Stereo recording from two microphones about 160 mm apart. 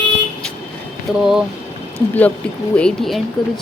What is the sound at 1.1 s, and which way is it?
Speech, centre (ahead or behind).